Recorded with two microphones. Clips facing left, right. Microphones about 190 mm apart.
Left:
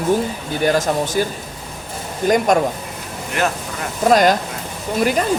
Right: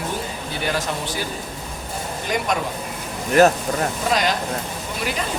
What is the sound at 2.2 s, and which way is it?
Speech, 45° left (ahead or behind).